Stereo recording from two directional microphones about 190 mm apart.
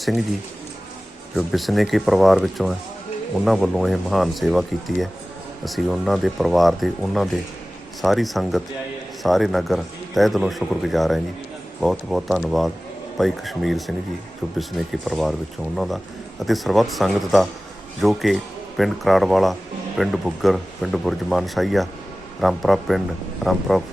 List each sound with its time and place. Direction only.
0.0 s speech: centre (ahead or behind)
1.4 s speech: centre (ahead or behind)